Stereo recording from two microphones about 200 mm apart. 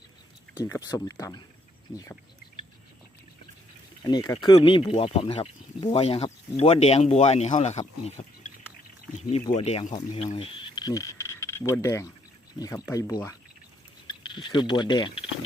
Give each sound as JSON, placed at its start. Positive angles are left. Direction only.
{"t": 0.6, "sound": "speech", "side_deg": 15}
{"t": 4.0, "sound": "speech", "side_deg": 20}